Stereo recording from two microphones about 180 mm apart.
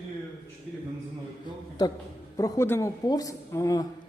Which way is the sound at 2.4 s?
15° left (ahead or behind).